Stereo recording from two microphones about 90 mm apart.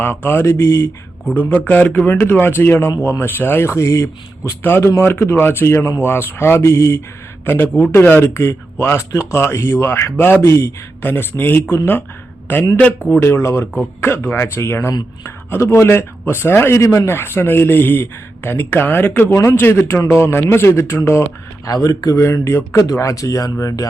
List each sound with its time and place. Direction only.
0.0 s speech: 25° left (ahead or behind)
21.7 s speech: 45° left (ahead or behind)
22.2 s speech: 30° left (ahead or behind)